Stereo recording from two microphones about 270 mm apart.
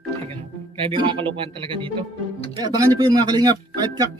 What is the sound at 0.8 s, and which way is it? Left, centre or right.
Speech, centre.